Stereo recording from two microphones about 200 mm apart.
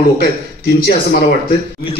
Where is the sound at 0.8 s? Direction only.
50° left (ahead or behind).